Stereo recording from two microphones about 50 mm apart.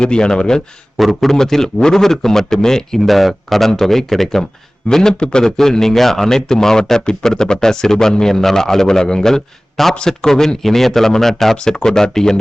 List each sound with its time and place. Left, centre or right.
0.0 s a man's voice: centre
0.9 s a man's voice: centre